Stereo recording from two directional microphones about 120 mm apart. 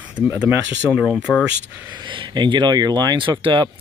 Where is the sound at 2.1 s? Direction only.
40° right (ahead or behind).